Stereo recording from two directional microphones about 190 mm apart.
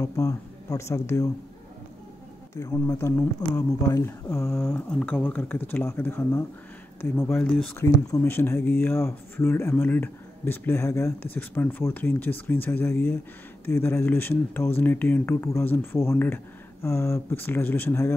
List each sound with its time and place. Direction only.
0.0 s speech: 15° left (ahead or behind)
2.5 s speech: 15° left (ahead or behind)
7.3 s speech: centre (ahead or behind)
7.7 s speech: 15° left (ahead or behind)